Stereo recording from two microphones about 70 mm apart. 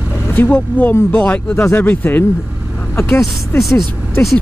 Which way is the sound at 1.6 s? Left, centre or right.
Left.